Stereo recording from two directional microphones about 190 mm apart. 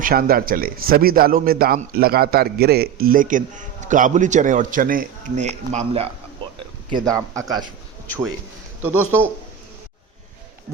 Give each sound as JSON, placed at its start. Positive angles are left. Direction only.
{"t": 0.0, "sound": "a man's voice", "side_deg": -50}
{"t": 7.3, "sound": "a man's voice", "side_deg": -20}
{"t": 8.0, "sound": "speech", "side_deg": 10}
{"t": 8.8, "sound": "a man's voice", "side_deg": -10}